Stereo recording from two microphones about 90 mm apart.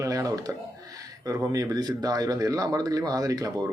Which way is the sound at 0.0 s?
40° right (ahead or behind).